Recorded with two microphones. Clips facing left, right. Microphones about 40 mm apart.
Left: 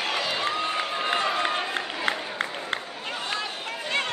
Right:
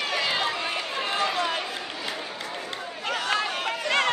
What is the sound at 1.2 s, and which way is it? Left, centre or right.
Run, left.